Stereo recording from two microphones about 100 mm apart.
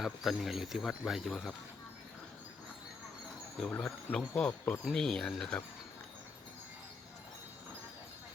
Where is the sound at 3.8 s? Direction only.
5° left (ahead or behind).